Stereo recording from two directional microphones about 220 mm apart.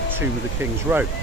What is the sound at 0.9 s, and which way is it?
Speech, 10° right (ahead or behind).